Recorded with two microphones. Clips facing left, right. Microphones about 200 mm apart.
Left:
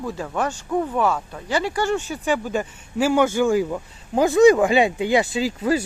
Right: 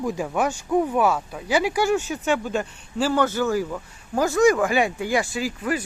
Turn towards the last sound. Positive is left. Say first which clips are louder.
# left 5 dB
turn(degrees=25)  # may be behind; listen again after turning